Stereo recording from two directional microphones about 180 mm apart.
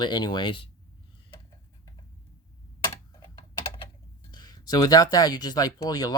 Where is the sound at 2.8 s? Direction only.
20° left (ahead or behind).